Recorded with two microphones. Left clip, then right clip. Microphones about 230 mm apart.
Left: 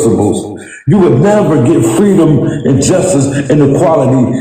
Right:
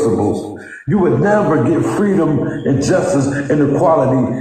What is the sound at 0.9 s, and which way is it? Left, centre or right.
A man's voice, left.